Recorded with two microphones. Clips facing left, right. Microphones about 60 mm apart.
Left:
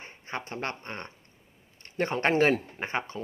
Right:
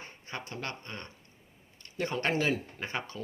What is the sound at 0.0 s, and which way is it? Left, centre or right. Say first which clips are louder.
Speech: left 4 dB; left.